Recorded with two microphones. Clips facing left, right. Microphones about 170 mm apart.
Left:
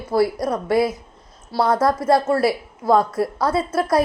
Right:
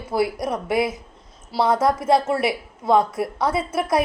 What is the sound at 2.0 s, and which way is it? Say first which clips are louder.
Speech: left 2 dB; 20° right (ahead or behind).